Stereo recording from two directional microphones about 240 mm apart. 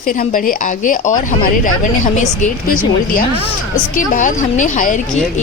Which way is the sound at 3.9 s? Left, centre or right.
Left.